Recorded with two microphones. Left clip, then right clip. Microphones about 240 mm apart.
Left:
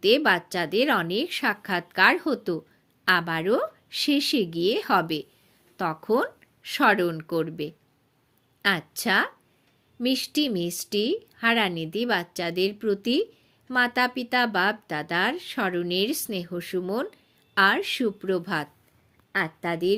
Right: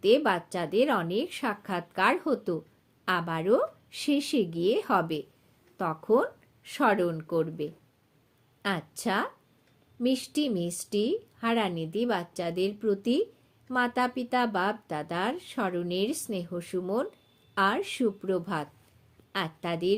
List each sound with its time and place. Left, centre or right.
0.0 s speech: left